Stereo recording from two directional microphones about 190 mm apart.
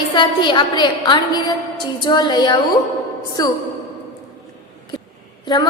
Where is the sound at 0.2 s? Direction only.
25° left (ahead or behind).